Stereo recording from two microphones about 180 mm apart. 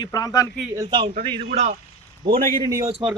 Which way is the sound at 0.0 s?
20° left (ahead or behind).